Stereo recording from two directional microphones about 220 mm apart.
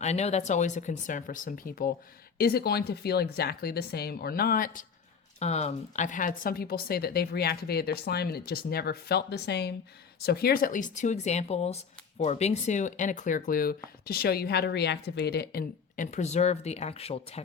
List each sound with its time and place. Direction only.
0.0 s speech: 30° left (ahead or behind)